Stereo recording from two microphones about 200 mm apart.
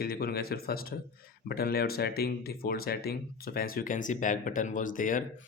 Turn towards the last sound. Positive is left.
turn(degrees=40)  # may be behind; listen again after turning